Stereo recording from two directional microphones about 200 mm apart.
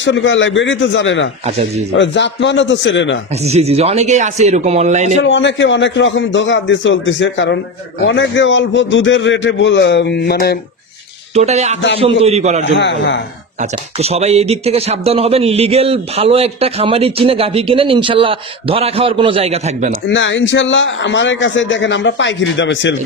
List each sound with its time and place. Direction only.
0.0 s a man's voice: 65° left (ahead or behind)
3.4 s speech: 30° right (ahead or behind)
5.2 s a man's voice: 65° left (ahead or behind)
11.3 s speech: 35° right (ahead or behind)
12.7 s a man's voice: 60° left (ahead or behind)
13.6 s speech: 30° right (ahead or behind)
20.1 s a man's voice: 65° left (ahead or behind)